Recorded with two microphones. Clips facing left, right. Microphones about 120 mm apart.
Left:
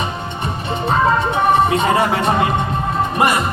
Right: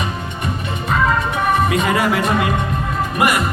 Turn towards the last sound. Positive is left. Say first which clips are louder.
# left 1 dB
turn(degrees=30)  # may be behind; listen again after turning